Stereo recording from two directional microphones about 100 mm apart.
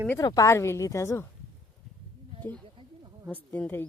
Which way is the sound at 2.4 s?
20° left (ahead or behind).